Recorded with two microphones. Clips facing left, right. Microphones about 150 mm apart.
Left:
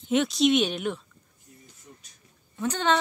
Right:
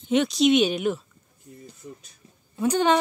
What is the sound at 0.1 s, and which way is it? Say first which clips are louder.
Speech: right 2 dB; centre (ahead or behind).